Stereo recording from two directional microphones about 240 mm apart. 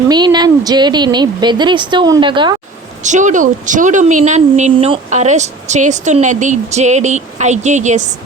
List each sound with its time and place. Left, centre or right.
0.1 s a woman's voice: centre
3.0 s speech: right